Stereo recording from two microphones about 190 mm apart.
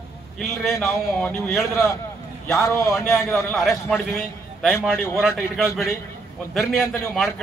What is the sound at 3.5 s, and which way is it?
Speech, centre (ahead or behind).